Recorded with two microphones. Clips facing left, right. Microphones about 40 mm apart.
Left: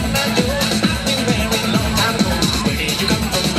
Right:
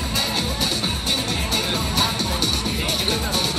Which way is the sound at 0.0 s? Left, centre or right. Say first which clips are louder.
Left 6 dB; left.